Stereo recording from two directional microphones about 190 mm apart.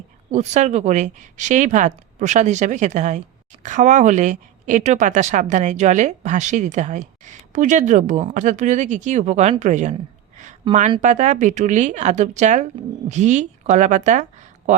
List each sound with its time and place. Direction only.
0.3 s speech: 40° right (ahead or behind)
10.3 s a sound: 40° right (ahead or behind)
11.0 s a woman's voice: 40° right (ahead or behind)